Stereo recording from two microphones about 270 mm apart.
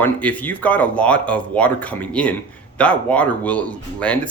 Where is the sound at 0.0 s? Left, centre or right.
Centre.